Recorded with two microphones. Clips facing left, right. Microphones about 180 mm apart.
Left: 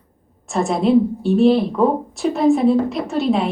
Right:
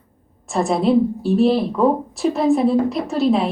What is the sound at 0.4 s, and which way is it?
A woman's voice, centre (ahead or behind).